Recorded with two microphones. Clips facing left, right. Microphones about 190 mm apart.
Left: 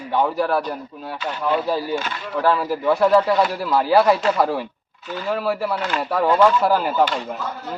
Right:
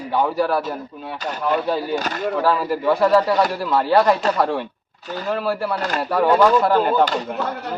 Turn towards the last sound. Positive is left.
turn(degrees=-70)  # may be behind; listen again after turning